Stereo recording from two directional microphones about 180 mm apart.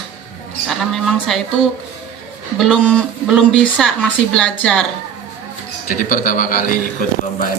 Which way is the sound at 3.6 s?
5° left (ahead or behind).